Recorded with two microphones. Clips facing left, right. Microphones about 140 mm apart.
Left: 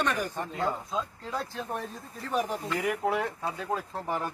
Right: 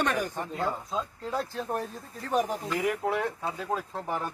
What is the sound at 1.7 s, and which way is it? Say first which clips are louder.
Speech: right 3 dB; 35° right (ahead or behind).